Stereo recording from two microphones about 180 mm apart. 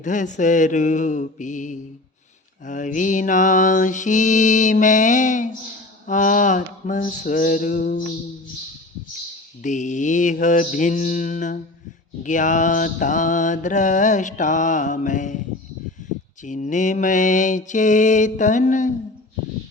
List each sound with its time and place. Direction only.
0.0 s mantra: 45° left (ahead or behind)
9.6 s mantra: 45° left (ahead or behind)